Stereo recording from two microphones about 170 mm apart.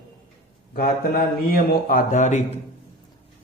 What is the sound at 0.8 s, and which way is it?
Speech, 60° left (ahead or behind).